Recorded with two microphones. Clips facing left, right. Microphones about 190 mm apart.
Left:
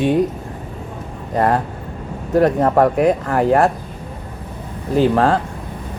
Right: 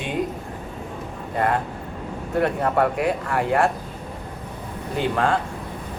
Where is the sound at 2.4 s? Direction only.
40° left (ahead or behind).